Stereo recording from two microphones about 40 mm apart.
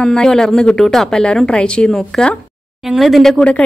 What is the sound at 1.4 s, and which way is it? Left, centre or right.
Speech, left.